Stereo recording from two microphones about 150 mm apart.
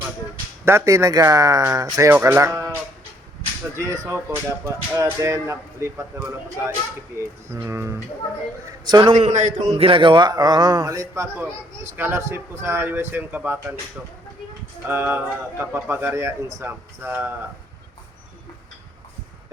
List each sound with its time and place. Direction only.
0.6 s speech: 15° right (ahead or behind)
3.8 s speech: 20° right (ahead or behind)
9.1 s a man's voice: 55° right (ahead or behind)
9.6 s a man's voice: 40° right (ahead or behind); by 13.7 s 15° right (ahead or behind)
14.8 s a man's voice: 15° right (ahead or behind)